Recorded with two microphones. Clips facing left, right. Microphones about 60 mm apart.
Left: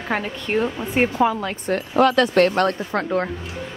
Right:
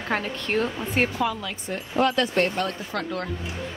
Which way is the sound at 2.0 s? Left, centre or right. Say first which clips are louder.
Left 6 dB; left.